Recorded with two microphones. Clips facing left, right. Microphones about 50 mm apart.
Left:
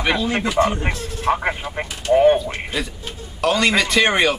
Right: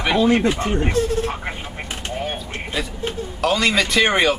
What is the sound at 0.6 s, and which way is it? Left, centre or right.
Speech, left.